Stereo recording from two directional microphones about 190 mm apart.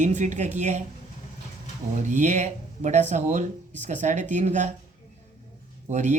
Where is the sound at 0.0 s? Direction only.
40° right (ahead or behind).